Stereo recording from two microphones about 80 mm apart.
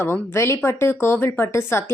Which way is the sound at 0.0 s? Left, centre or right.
Left.